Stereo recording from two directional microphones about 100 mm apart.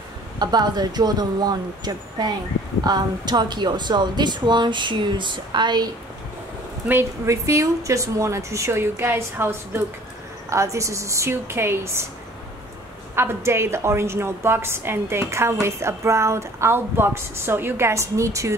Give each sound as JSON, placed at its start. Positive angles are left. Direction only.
{"t": 0.4, "sound": "a woman's voice", "side_deg": -45}
{"t": 6.9, "sound": "a woman's voice", "side_deg": -25}
{"t": 13.1, "sound": "a woman's voice", "side_deg": -25}